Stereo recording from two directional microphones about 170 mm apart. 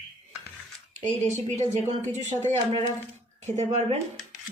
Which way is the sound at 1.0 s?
45° right (ahead or behind).